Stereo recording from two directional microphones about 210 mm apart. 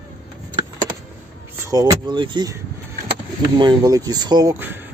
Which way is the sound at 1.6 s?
15° right (ahead or behind).